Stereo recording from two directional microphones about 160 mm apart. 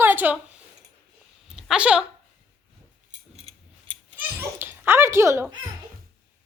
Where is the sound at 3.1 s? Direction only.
40° right (ahead or behind).